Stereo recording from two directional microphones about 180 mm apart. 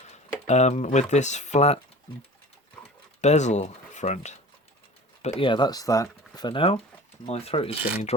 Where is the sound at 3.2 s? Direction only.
40° left (ahead or behind).